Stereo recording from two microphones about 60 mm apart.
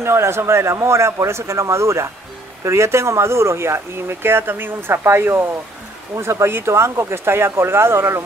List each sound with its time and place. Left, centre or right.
0.0 s speech: right
6.1 s speech: right